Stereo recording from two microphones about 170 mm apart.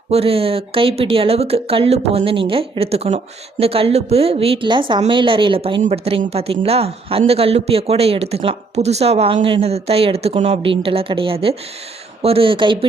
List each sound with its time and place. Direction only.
0.1 s speech: 35° right (ahead or behind)